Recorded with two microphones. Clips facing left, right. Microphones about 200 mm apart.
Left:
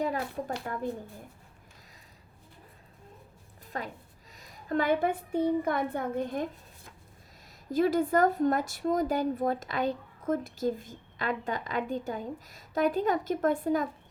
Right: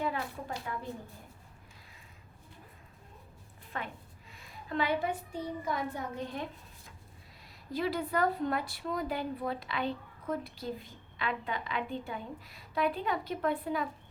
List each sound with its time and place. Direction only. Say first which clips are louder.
0.0 s a woman's voice: left 4 dB; 40° left (ahead or behind)
3.7 s a woman's voice: left 3 dB; 40° left (ahead or behind)
7.7 s a woman's voice: left 7 dB; 45° left (ahead or behind)